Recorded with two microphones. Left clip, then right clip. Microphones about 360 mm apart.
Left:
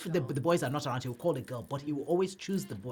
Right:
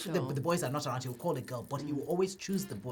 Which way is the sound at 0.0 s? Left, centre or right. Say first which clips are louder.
Left 2 dB; left.